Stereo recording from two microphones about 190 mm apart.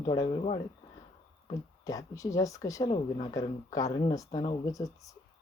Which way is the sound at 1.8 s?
15° left (ahead or behind).